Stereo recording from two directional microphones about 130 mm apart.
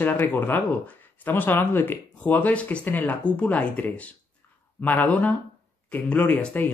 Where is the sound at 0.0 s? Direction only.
15° left (ahead or behind).